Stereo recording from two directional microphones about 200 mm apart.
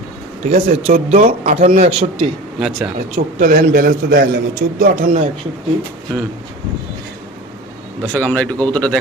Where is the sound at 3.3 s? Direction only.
45° right (ahead or behind).